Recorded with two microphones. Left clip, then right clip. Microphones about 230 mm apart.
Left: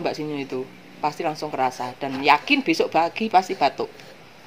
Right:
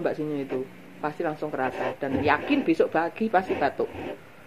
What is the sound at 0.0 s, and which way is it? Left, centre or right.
A woman's voice, left.